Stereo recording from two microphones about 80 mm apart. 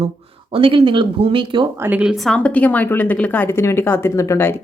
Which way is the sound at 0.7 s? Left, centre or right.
Right.